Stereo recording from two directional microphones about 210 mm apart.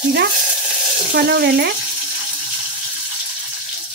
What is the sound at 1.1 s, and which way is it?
Speech, 50° right (ahead or behind).